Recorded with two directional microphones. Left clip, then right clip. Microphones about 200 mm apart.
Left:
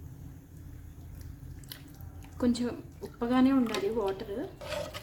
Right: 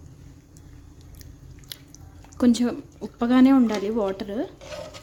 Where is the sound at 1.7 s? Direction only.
40° right (ahead or behind).